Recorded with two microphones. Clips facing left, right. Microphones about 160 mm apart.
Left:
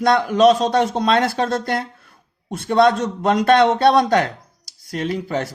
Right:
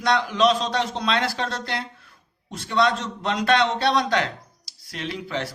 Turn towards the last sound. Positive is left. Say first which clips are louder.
# left 7 dB
turn(degrees=45)  # may be behind; listen again after turning